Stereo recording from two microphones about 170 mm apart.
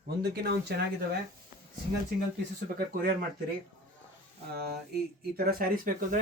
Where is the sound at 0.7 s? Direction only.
70° right (ahead or behind).